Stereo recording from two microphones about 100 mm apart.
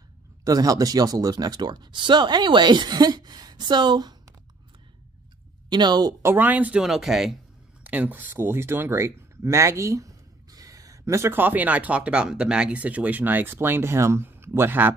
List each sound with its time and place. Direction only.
0.4 s speech: 35° right (ahead or behind)
5.7 s speech: 45° right (ahead or behind)
6.2 s speech: 20° right (ahead or behind)
6.8 s speech: 5° right (ahead or behind)
7.8 s speech: 15° right (ahead or behind)